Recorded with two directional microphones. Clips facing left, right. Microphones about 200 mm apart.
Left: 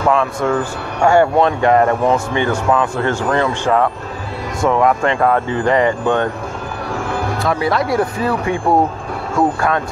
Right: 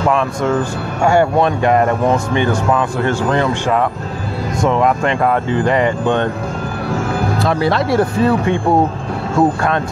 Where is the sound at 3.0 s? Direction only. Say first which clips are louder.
Right 1 dB; 20° right (ahead or behind).